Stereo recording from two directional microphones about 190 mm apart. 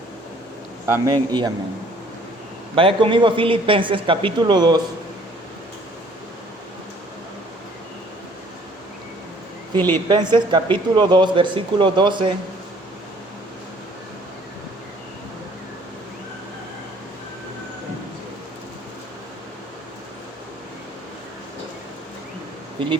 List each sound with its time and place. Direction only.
0.9 s speech: 15° right (ahead or behind)
2.7 s speech: 25° right (ahead or behind)
10.1 s speech: 25° right (ahead or behind)
22.8 s speech: 25° right (ahead or behind)